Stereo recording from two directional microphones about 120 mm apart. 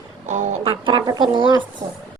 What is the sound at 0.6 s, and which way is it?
Speech, 45° right (ahead or behind).